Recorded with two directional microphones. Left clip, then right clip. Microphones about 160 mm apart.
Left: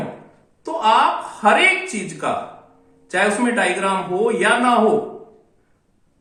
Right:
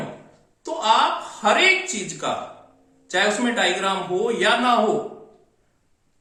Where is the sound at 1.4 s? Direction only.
15° right (ahead or behind).